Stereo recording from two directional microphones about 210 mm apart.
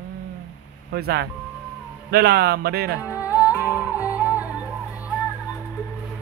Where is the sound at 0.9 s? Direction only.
50° right (ahead or behind).